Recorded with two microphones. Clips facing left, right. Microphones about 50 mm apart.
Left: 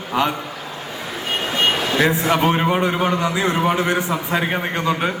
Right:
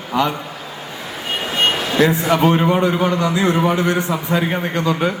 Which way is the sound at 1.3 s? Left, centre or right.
Centre.